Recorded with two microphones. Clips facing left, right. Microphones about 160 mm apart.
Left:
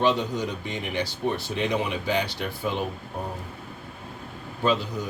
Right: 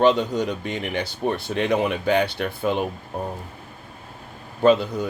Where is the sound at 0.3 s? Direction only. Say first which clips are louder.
Right 5 dB; 60° right (ahead or behind).